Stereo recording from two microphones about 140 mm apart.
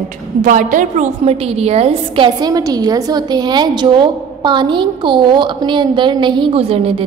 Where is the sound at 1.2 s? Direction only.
45° right (ahead or behind).